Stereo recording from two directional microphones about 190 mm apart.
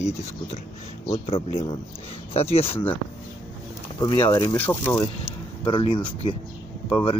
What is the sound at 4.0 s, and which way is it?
Speech, 25° left (ahead or behind).